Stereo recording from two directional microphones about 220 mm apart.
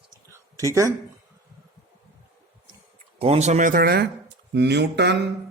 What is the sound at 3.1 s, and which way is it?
Speech, 25° right (ahead or behind).